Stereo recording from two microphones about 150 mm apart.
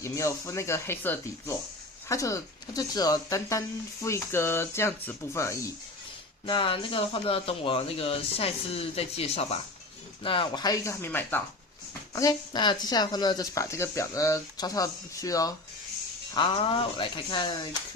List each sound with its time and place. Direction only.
0.0 s speech: 20° left (ahead or behind)
6.4 s speech: 35° left (ahead or behind); by 11.4 s 15° left (ahead or behind)
12.1 s speech: 25° left (ahead or behind)
16.3 s speech: 35° left (ahead or behind)